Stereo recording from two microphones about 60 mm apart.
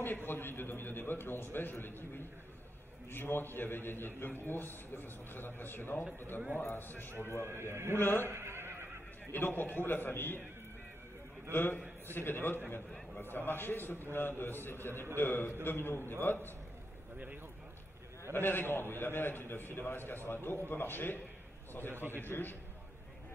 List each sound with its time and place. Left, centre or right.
0.0 s a man's voice: left
7.4 s a man's voice: right
8.0 s a man's voice: left
8.3 s neigh: right
9.3 s a man's voice: left
11.5 s a man's voice: left
18.3 s a man's voice: left
21.9 s a man's voice: right
22.2 s a man's voice: left